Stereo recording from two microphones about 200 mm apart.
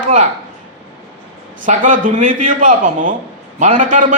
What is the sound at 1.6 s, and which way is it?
A man's voice, 40° right (ahead or behind).